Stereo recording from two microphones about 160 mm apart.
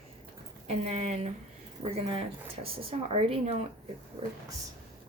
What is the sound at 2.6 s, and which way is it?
Speech, 35° right (ahead or behind).